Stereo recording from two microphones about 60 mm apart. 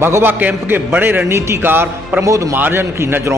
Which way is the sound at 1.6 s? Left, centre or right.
Right.